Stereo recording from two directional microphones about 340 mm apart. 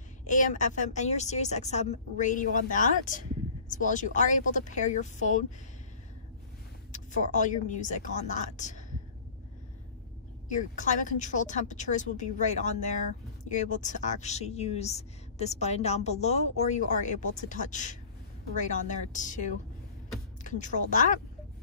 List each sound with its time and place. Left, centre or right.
0.3 s a woman's voice: left
6.9 s a woman's voice: left
10.5 s a woman's voice: left